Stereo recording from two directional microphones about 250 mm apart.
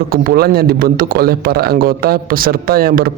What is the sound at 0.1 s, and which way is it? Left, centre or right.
A man's voice, right.